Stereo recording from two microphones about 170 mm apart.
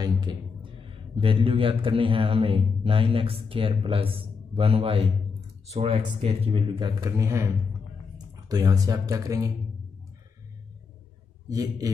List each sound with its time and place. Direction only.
0.0 s a man's voice: 25° right (ahead or behind)
11.4 s speech: 20° right (ahead or behind)